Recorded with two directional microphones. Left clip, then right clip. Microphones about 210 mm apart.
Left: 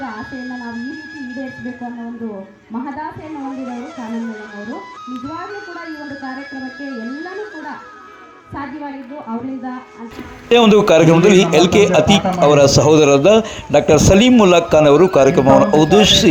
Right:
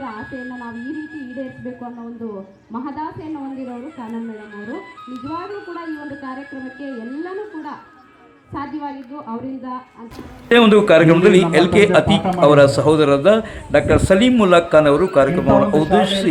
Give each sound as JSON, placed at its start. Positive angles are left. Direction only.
{"t": 0.0, "sound": "music", "side_deg": 50}
{"t": 3.5, "sound": "speech", "side_deg": 50}
{"t": 10.5, "sound": "a man's voice", "side_deg": 20}